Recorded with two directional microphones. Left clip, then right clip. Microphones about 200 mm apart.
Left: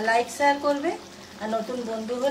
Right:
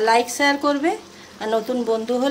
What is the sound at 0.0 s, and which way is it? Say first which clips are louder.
Speech: right 4 dB; 50° right (ahead or behind).